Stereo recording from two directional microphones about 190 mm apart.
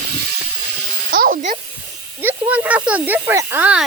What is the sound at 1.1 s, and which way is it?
Speech, 45° right (ahead or behind).